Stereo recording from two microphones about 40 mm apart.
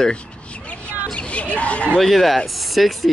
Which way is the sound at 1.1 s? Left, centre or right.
Left.